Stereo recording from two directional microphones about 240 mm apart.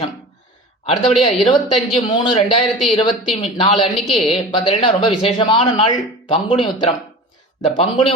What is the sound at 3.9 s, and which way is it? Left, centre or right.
Speech, centre.